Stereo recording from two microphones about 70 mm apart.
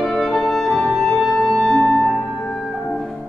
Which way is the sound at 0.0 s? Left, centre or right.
Centre.